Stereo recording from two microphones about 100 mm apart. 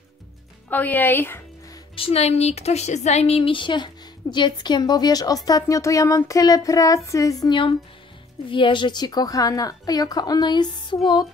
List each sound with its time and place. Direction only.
0.7 s speech: 15° left (ahead or behind)
2.0 s a woman's voice: 85° left; by 7.4 s 35° left (ahead or behind)
7.4 s a woman's voice: 55° left (ahead or behind)